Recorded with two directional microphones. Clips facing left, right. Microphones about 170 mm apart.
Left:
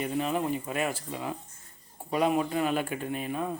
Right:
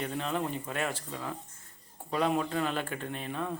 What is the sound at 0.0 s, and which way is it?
Speech, 10° left (ahead or behind).